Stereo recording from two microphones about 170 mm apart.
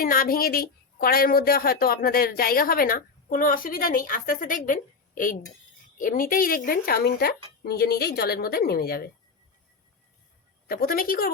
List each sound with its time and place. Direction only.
0.0 s a woman's voice: 55° left (ahead or behind)
10.7 s a woman's voice: 60° left (ahead or behind)